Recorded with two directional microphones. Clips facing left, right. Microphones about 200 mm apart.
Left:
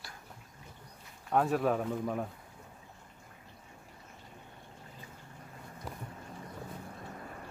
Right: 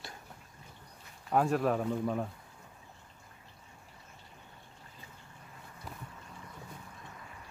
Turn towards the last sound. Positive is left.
turn(degrees=45)  # may be behind; listen again after turning